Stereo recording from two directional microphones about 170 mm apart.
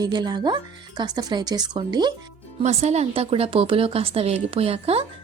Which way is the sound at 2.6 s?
40° right (ahead or behind).